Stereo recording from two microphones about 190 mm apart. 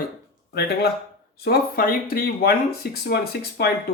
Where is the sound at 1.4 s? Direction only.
55° left (ahead or behind).